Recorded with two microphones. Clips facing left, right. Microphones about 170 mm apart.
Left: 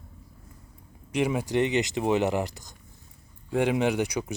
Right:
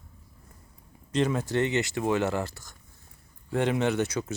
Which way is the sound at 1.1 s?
10° left (ahead or behind).